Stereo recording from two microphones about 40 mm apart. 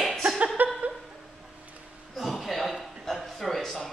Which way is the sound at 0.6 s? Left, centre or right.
Right.